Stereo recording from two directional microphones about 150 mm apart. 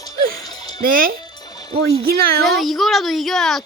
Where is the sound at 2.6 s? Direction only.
Centre (ahead or behind).